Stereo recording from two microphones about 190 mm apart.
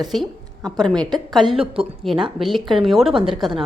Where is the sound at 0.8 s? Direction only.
Centre (ahead or behind).